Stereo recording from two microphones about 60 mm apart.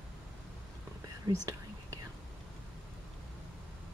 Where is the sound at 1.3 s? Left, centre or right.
Right.